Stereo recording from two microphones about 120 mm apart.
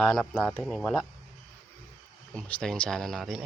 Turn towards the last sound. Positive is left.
turn(degrees=0)  # may be behind; listen again after turning